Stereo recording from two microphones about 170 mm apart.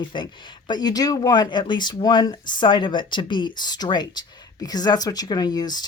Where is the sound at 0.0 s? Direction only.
30° left (ahead or behind).